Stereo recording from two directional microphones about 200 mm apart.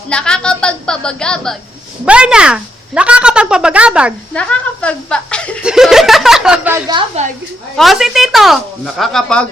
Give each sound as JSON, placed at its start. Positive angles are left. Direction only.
{"t": 0.1, "sound": "speech", "side_deg": 5}
{"t": 4.4, "sound": "speech", "side_deg": 5}
{"t": 7.8, "sound": "speech", "side_deg": 0}